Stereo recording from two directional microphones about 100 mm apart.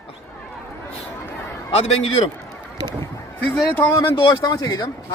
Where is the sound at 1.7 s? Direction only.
90° left.